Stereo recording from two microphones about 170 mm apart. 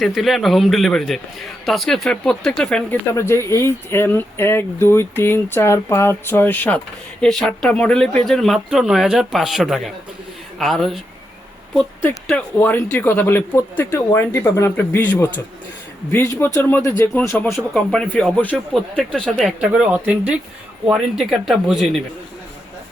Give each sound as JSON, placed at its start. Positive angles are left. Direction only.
{"t": 0.0, "sound": "a man's voice", "side_deg": 0}
{"t": 12.0, "sound": "a man's voice", "side_deg": 10}